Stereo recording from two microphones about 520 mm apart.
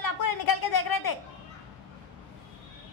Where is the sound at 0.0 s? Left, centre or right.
Left.